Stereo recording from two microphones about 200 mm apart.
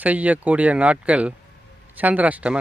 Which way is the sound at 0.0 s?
5° right (ahead or behind).